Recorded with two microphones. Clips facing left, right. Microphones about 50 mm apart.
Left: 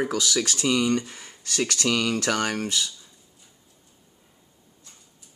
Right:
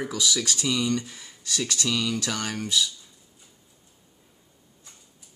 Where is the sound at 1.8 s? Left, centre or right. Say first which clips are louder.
Left 4 dB; left.